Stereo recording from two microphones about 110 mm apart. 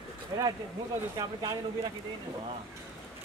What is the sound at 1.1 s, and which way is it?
Speech, 35° right (ahead or behind).